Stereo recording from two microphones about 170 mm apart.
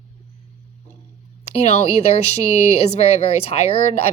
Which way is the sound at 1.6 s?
40° left (ahead or behind).